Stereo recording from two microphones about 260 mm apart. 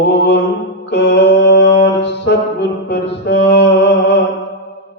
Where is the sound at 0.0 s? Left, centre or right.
Left.